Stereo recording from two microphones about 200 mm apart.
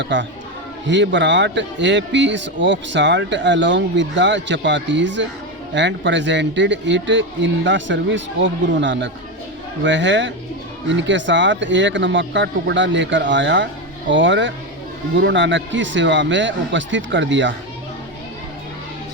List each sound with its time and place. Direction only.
0.0 s a man's voice: 65° right (ahead or behind)